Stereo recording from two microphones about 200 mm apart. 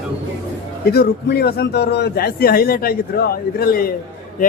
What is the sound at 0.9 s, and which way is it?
A man's voice, 50° left (ahead or behind).